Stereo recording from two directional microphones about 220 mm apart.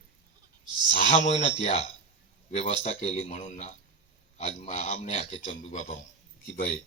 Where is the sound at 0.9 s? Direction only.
30° left (ahead or behind).